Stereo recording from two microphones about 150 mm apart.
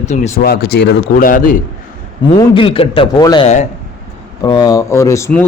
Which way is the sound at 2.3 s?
35° left (ahead or behind).